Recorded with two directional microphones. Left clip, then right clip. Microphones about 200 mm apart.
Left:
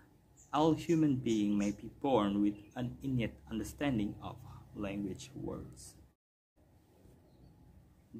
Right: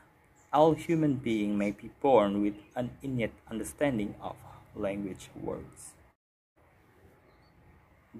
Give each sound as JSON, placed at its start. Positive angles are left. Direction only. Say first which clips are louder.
{"t": 0.5, "sound": "speech", "louder": "right 7 dB", "side_deg": -10}